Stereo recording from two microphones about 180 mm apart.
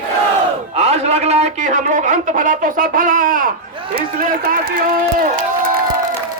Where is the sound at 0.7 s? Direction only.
35° right (ahead or behind); by 5.4 s 50° right (ahead or behind).